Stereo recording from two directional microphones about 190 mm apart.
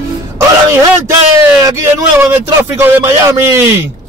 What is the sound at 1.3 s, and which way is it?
Speech, 15° right (ahead or behind).